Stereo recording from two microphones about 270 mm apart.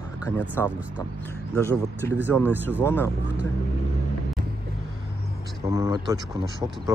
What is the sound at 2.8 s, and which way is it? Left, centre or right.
Speech, centre.